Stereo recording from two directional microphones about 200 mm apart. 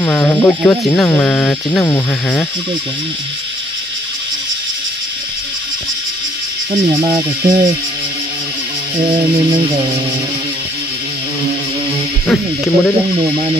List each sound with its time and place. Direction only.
0.0 s speech: 10° left (ahead or behind)
6.7 s speech: 20° right (ahead or behind)
9.5 s speech: 20° right (ahead or behind)
12.3 s speech: 10° left (ahead or behind)